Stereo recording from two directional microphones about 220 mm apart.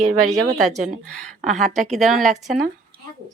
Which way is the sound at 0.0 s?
90° right.